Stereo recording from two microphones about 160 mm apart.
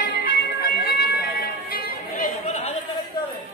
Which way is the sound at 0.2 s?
65° left (ahead or behind).